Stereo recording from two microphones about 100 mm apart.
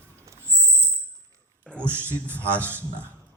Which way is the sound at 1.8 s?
20° right (ahead or behind).